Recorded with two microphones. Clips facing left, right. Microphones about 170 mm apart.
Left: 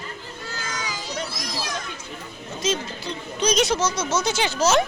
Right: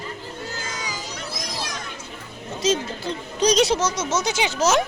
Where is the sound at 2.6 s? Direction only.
40° right (ahead or behind).